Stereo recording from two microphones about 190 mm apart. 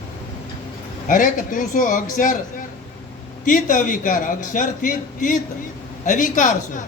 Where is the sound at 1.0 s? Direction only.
45° left (ahead or behind).